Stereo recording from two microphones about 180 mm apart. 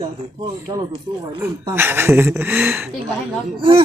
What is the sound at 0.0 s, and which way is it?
Speech, 20° right (ahead or behind).